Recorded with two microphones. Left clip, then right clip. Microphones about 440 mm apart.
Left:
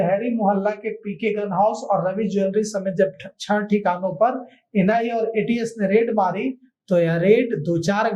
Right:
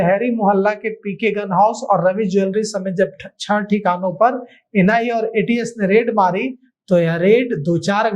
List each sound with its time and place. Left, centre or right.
0.0 s speech: right